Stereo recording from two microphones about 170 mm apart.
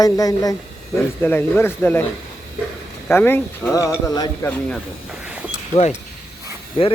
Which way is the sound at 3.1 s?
10° left (ahead or behind).